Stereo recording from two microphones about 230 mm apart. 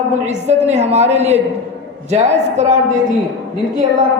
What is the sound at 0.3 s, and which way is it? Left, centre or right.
A woman's voice, right.